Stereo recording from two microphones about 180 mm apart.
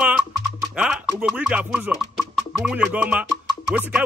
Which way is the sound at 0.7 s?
5° right (ahead or behind).